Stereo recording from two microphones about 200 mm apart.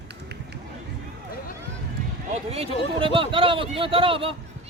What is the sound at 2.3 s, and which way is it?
Speech, 30° right (ahead or behind).